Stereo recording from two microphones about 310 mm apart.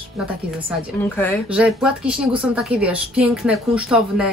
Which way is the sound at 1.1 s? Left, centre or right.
Centre.